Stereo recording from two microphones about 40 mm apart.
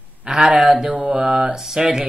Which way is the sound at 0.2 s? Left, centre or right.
Centre.